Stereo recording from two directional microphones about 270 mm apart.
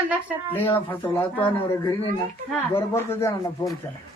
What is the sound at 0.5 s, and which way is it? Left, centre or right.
Speech, centre.